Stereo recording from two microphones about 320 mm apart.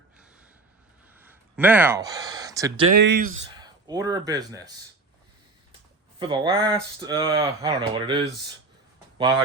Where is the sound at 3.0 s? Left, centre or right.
Right.